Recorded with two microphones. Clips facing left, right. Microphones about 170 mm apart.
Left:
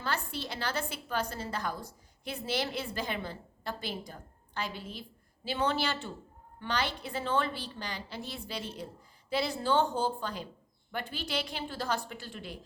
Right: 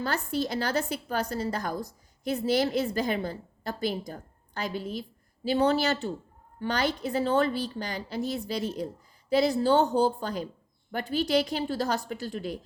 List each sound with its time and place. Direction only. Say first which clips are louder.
0.0 s a woman's voice: right 7 dB; 40° right (ahead or behind)